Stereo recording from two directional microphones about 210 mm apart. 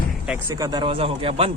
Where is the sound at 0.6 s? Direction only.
20° right (ahead or behind).